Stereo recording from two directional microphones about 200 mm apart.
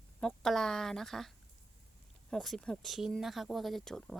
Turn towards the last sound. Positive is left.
turn(degrees=0)  # may be behind; listen again after turning